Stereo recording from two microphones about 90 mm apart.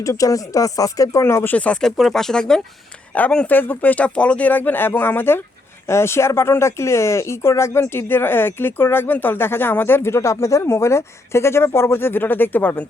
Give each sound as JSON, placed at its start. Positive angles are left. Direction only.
{"t": 0.0, "sound": "speech", "side_deg": 40}
{"t": 1.5, "sound": "speech", "side_deg": 15}